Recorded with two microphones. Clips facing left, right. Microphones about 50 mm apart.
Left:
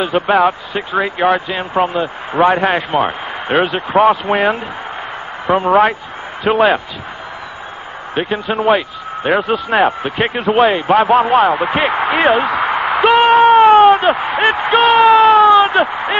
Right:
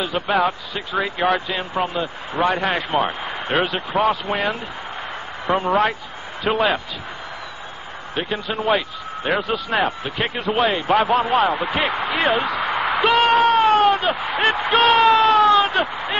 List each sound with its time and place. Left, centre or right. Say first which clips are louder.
0.0 s speech: left 7 dB; left
8.1 s speech: left 7 dB; left
14.8 s a sound: left 6 dB; centre